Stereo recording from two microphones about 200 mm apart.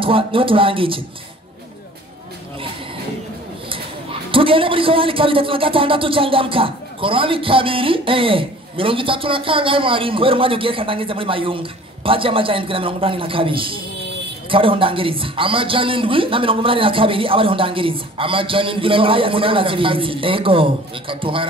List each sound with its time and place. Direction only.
0.0 s speech: 25° right (ahead or behind)
4.3 s speech: 25° right (ahead or behind)